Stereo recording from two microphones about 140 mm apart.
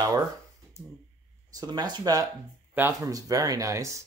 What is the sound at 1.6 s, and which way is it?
Speech, 30° right (ahead or behind).